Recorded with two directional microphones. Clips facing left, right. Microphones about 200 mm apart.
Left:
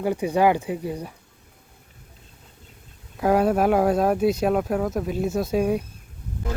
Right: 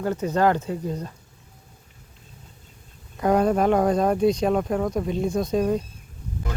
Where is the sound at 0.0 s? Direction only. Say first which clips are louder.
Left 1 dB; 15° left (ahead or behind).